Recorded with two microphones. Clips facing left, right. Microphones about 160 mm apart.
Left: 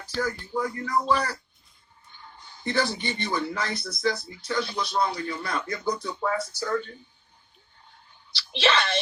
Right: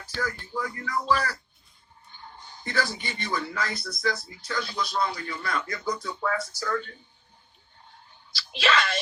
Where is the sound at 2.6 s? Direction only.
25° left (ahead or behind).